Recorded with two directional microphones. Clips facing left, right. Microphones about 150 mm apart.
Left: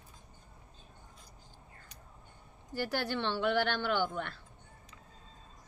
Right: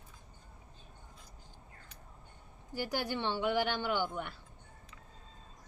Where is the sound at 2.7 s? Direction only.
15° right (ahead or behind).